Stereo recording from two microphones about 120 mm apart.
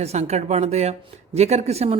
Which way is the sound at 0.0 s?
65° right (ahead or behind).